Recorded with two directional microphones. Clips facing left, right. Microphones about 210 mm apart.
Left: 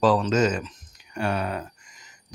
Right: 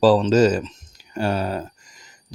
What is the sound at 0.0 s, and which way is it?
Speech, 30° right (ahead or behind).